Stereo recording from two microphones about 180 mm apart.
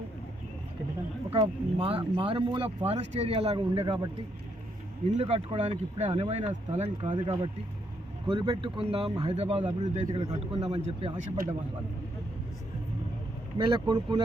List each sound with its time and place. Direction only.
1.3 s speech: 30° right (ahead or behind)
5.1 s speech: 35° right (ahead or behind)
13.6 s speech: 25° right (ahead or behind)